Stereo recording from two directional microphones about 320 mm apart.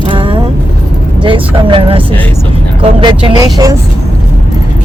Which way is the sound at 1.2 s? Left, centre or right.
Centre.